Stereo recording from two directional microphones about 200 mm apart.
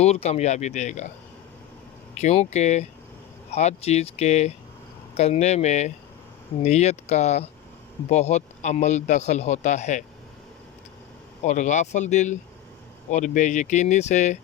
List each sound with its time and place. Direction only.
0.0 s a man's voice: 30° left (ahead or behind)
2.1 s a man's voice: 35° left (ahead or behind)
11.4 s a man's voice: 35° left (ahead or behind)